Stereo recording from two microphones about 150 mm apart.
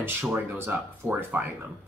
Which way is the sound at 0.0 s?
15° right (ahead or behind).